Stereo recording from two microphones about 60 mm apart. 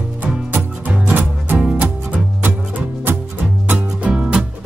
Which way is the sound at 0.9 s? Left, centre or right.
Right.